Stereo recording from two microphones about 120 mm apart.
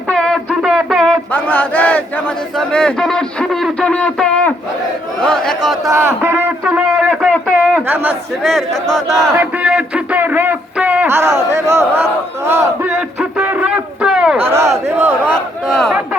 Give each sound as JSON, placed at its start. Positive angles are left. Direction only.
{"t": 0.1, "sound": "a sound", "side_deg": 5}
{"t": 1.3, "sound": "battle cry", "side_deg": 10}
{"t": 2.6, "sound": "speech", "side_deg": 5}
{"t": 5.9, "sound": "battle cry", "side_deg": -20}
{"t": 6.7, "sound": "a man's voice", "side_deg": -5}
{"t": 8.4, "sound": "speech", "side_deg": 0}
{"t": 9.3, "sound": "a man's voice", "side_deg": -15}
{"t": 11.5, "sound": "battle cry", "side_deg": -25}
{"t": 13.1, "sound": "a sound", "side_deg": -5}
{"t": 14.3, "sound": "battle cry", "side_deg": -20}
{"t": 15.2, "sound": "speech", "side_deg": 5}